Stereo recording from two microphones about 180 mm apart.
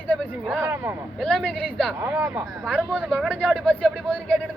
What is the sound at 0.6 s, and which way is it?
Speech, 10° right (ahead or behind).